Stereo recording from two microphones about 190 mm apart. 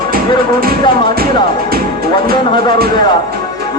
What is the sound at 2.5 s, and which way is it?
Speech, 25° left (ahead or behind).